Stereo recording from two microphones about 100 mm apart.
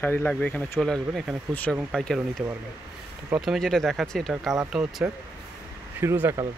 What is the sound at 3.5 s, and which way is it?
Speech, 5° left (ahead or behind).